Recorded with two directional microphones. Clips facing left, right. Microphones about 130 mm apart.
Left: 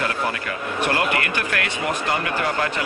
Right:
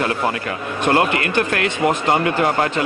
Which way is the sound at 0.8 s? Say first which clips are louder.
Right 5 dB; 25° right (ahead or behind).